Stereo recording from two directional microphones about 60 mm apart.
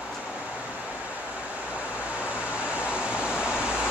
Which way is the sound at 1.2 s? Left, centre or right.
Right.